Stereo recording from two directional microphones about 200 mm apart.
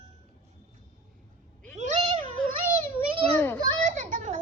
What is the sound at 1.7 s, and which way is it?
Cat, 35° right (ahead or behind).